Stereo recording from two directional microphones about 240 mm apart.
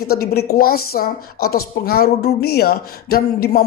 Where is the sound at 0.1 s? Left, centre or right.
Left.